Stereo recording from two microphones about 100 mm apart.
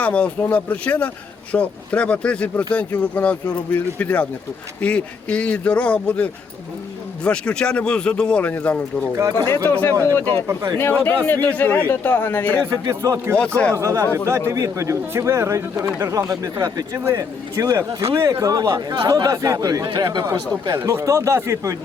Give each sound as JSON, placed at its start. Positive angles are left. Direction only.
{"t": 0.0, "sound": "speech", "side_deg": 15}
{"t": 7.3, "sound": "speech", "side_deg": 10}
{"t": 9.1, "sound": "speech", "side_deg": -30}
{"t": 9.6, "sound": "speech", "side_deg": 20}
{"t": 10.4, "sound": "speech", "side_deg": -30}
{"t": 10.8, "sound": "speech", "side_deg": 20}
{"t": 12.8, "sound": "speech", "side_deg": -35}
{"t": 20.7, "sound": "speech", "side_deg": -30}